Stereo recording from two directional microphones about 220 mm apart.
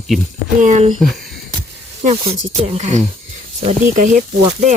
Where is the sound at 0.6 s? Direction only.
35° right (ahead or behind).